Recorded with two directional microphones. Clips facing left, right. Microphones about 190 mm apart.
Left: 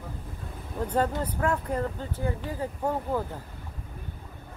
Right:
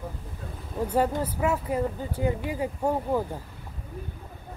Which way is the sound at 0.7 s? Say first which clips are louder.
Right 2 dB; 10° right (ahead or behind).